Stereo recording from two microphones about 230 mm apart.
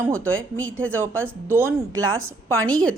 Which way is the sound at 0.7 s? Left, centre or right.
Right.